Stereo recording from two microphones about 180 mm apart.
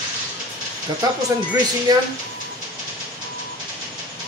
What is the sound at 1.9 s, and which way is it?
Speech, 20° right (ahead or behind).